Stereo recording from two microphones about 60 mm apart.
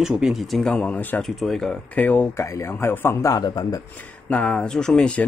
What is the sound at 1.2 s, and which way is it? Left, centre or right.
Speech, centre.